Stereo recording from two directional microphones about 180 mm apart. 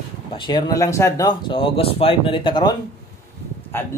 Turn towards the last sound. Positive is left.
turn(degrees=15)  # may be behind; listen again after turning